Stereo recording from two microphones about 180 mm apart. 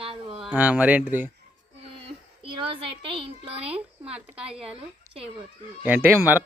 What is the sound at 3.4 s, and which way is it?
A child's voice, 35° right (ahead or behind).